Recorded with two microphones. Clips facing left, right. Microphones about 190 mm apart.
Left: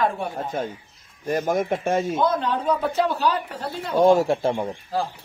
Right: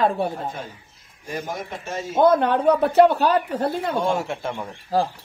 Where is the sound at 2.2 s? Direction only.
60° right (ahead or behind).